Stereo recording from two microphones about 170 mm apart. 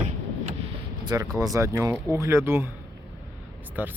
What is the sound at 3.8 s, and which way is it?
Speech, 10° right (ahead or behind).